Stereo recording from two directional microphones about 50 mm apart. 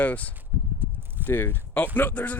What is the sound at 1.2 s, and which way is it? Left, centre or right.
Speech, left.